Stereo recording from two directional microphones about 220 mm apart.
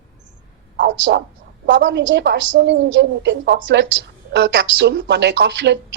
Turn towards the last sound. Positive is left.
turn(degrees=-50)  # may be behind; listen again after turning